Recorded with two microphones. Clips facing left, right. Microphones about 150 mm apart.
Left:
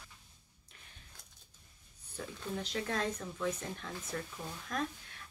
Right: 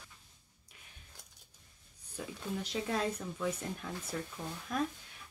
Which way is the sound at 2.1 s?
15° right (ahead or behind).